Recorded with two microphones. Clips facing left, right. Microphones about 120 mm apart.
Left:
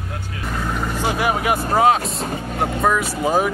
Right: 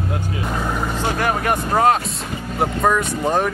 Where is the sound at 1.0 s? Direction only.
10° left (ahead or behind).